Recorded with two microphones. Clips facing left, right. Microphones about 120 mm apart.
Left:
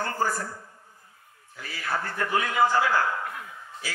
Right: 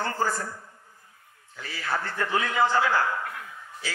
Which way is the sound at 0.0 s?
25° right (ahead or behind).